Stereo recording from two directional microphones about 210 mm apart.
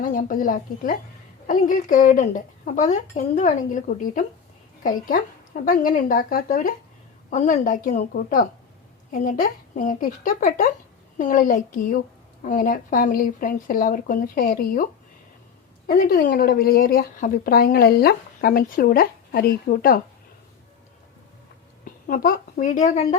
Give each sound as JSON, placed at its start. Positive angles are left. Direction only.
{"t": 0.0, "sound": "speech", "side_deg": 40}
{"t": 15.9, "sound": "a woman's voice", "side_deg": 45}
{"t": 21.8, "sound": "a woman's voice", "side_deg": 40}